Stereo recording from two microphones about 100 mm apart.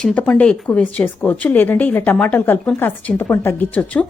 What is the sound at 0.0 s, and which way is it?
A woman's voice, 10° left (ahead or behind).